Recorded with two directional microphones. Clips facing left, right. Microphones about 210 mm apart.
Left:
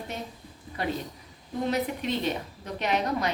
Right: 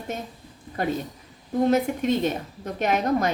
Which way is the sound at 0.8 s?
45° right (ahead or behind).